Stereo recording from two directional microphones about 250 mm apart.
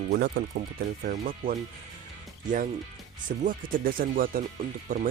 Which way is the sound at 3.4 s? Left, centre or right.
Right.